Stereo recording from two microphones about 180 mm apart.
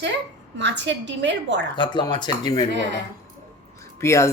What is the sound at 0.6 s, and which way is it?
A woman's voice, 80° right.